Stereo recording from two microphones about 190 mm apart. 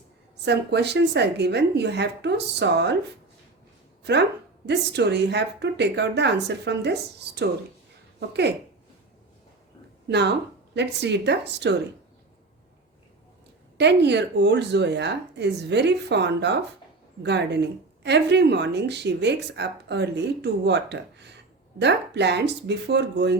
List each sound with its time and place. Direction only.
0.4 s a woman's voice: 65° right (ahead or behind)
4.1 s a woman's voice: 60° right (ahead or behind)
10.1 s a woman's voice: 60° right (ahead or behind)
13.7 s a woman's voice: 65° right (ahead or behind)